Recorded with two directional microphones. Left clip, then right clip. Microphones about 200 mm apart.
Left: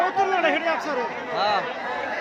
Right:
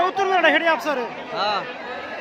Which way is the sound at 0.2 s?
55° right (ahead or behind).